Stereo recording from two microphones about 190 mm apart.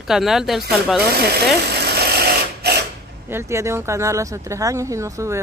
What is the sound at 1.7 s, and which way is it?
Sewing machine, 60° right (ahead or behind).